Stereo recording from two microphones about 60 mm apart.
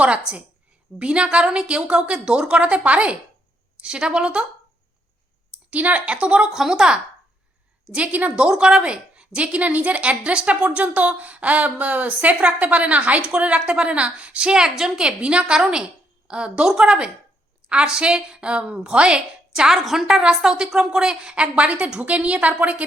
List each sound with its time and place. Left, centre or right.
0.9 s a woman's voice: centre
5.7 s a woman's voice: right
6.5 s a woman's voice: centre
7.9 s a woman's voice: right
8.4 s a woman's voice: centre